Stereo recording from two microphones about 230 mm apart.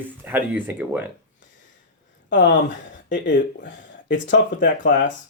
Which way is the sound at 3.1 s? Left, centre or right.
Left.